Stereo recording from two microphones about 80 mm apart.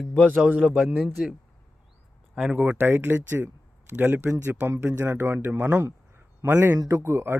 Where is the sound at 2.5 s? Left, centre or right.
Right.